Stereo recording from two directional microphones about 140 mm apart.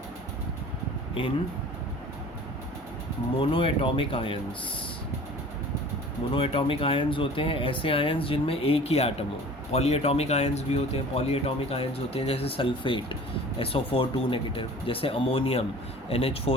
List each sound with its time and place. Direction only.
1.2 s speech: 40° left (ahead or behind)
3.3 s speech: 40° left (ahead or behind)
6.3 s speech: 40° left (ahead or behind)